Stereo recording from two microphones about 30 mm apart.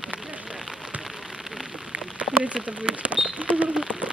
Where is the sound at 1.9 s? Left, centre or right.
Right.